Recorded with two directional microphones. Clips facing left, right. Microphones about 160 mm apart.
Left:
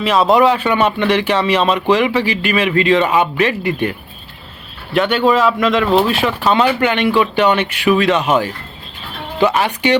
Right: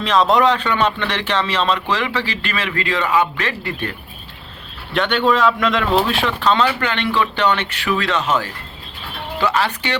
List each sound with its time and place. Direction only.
0.0 s speech: 5° left (ahead or behind)
4.9 s speech: 5° left (ahead or behind)